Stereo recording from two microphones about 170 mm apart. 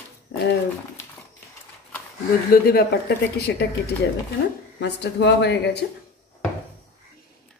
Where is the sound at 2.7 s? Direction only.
65° left (ahead or behind).